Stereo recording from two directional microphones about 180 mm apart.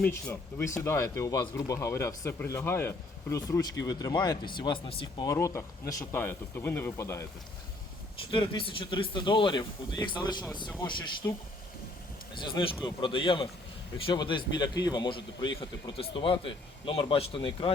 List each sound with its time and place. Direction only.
0.0 s speech: 15° left (ahead or behind); by 5.3 s 30° left (ahead or behind)
5.3 s speech: 15° left (ahead or behind)
8.3 s speech: 30° left (ahead or behind)
12.3 s speech: 25° left (ahead or behind)